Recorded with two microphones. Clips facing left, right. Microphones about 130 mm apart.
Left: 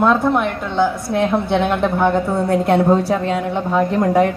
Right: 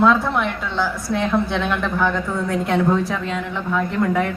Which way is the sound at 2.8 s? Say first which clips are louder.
Left 4 dB; 35° left (ahead or behind).